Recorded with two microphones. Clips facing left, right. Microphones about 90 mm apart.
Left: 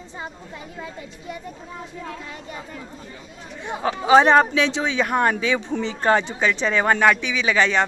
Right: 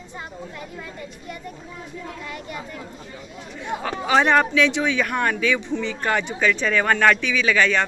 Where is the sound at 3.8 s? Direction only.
30° left (ahead or behind).